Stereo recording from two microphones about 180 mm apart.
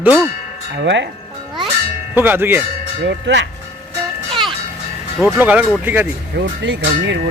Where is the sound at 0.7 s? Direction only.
75° right (ahead or behind).